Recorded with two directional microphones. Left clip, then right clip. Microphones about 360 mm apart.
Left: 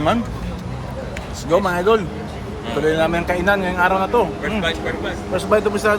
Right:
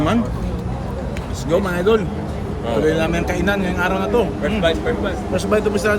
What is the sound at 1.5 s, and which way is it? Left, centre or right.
A man's voice, centre.